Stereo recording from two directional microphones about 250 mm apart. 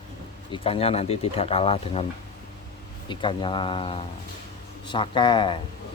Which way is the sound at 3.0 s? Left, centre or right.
Centre.